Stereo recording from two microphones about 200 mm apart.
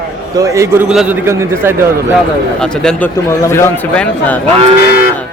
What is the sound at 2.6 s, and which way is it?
A man's voice, 5° left (ahead or behind).